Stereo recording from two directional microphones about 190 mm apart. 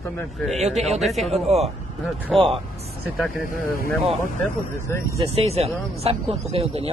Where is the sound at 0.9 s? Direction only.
Centre (ahead or behind).